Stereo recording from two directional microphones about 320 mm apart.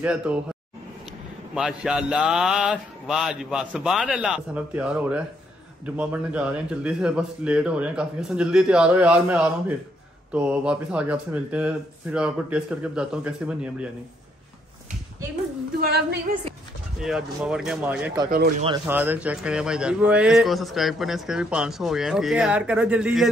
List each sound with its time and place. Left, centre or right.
0.0 s a man's voice: centre
1.5 s a man's voice: centre
15.8 s female singing: right
17.0 s a man's voice: centre
18.3 s female singing: right
18.7 s a man's voice: centre